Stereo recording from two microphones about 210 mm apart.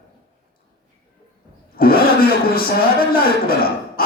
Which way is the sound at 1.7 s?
45° left (ahead or behind).